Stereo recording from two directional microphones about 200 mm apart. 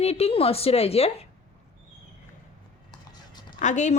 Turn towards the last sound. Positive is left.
turn(degrees=35)  # may be behind; listen again after turning